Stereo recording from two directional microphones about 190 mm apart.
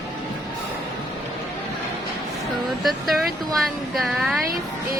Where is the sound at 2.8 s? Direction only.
Centre (ahead or behind).